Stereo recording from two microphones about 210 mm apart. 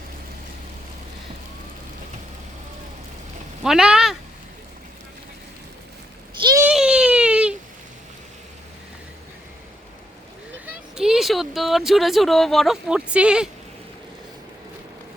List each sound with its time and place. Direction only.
3.6 s speech: 5° right (ahead or behind)
6.4 s a sound: 15° right (ahead or behind)
6.7 s baby cry: 5° right (ahead or behind)
10.7 s speech: 5° right (ahead or behind)